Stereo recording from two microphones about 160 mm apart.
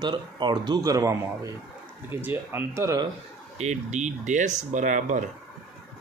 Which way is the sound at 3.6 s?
45° right (ahead or behind).